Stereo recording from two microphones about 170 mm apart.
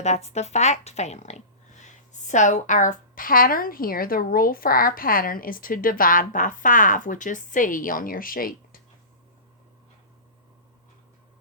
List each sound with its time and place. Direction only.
0.0 s speech: 40° left (ahead or behind); by 8.8 s 55° left (ahead or behind)